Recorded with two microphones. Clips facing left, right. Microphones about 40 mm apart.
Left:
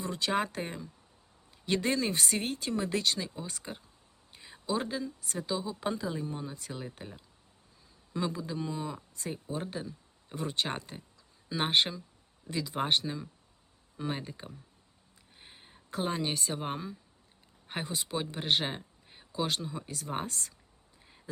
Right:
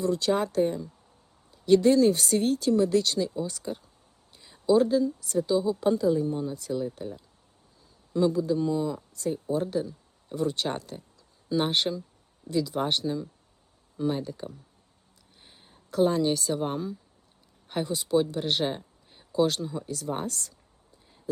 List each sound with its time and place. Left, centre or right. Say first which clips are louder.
0.0 s speech: right 6 dB; left
1.6 s speech: right 11 dB; left
6.5 s speech: right 11 dB; left
8.1 s a man's voice: right 10 dB; centre
19.9 s speech: right 3 dB; left